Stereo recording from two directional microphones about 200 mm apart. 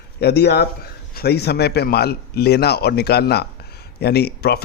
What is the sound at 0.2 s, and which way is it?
A man's voice, 55° left (ahead or behind).